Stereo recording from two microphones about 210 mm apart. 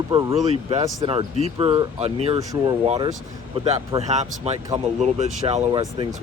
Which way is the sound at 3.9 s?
30° right (ahead or behind).